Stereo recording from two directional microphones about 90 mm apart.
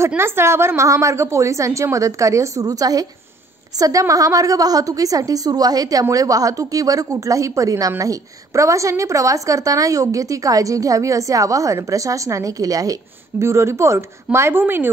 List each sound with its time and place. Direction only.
0.2 s a woman's voice: 30° right (ahead or behind)